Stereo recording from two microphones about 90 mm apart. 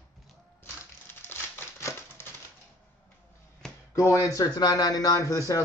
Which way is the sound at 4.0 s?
40° left (ahead or behind).